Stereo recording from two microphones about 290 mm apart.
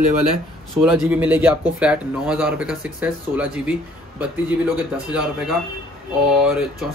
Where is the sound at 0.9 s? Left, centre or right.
Centre.